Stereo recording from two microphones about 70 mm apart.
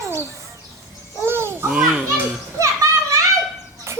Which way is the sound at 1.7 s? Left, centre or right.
Centre.